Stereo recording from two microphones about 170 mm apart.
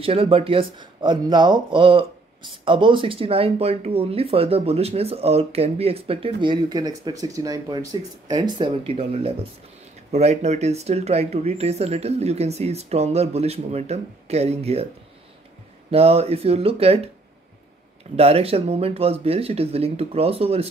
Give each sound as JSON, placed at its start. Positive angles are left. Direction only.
{"t": 0.0, "sound": "speech", "side_deg": -35}
{"t": 15.9, "sound": "speech", "side_deg": -35}
{"t": 18.1, "sound": "speech", "side_deg": -35}